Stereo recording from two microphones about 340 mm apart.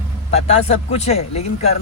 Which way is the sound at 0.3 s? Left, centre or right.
Centre.